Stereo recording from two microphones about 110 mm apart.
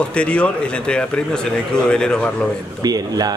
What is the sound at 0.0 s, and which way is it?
A man's voice, 10° left (ahead or behind).